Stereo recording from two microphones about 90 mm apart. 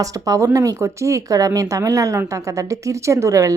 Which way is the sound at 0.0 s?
40° right (ahead or behind).